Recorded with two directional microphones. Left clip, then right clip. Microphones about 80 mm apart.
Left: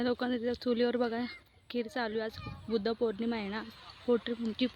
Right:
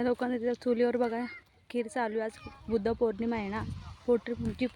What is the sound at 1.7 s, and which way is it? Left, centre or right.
Speech, centre.